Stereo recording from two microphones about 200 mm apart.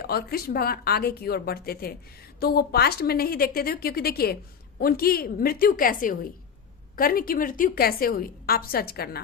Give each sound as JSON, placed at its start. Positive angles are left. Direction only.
{"t": 0.0, "sound": "a woman's voice", "side_deg": 50}